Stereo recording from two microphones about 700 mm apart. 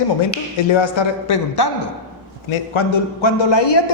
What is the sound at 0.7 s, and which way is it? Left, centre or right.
A man's voice, left.